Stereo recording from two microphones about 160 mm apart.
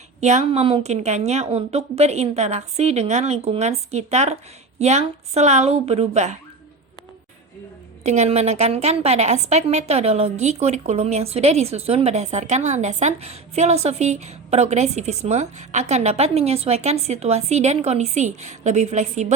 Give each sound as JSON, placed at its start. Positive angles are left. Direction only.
{"t": 0.2, "sound": "a woman's voice", "side_deg": -45}
{"t": 8.0, "sound": "a woman's voice", "side_deg": -45}